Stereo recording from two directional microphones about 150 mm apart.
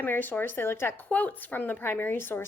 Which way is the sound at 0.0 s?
15° left (ahead or behind).